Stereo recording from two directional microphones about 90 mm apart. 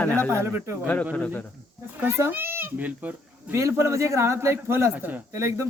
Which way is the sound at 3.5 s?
30° right (ahead or behind).